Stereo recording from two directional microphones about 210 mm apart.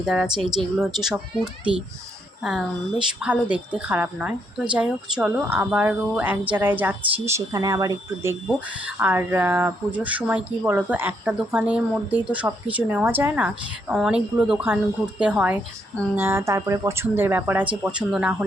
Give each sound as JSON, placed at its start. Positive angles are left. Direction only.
{"t": 0.0, "sound": "speech", "side_deg": -5}